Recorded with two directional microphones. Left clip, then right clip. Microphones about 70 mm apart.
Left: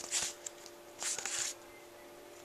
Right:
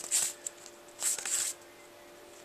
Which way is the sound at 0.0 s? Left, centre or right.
Centre.